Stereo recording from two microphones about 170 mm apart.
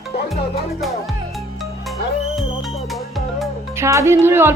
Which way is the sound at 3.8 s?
15° right (ahead or behind).